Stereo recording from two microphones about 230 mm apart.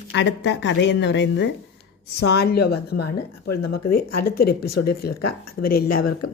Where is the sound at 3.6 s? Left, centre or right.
Left.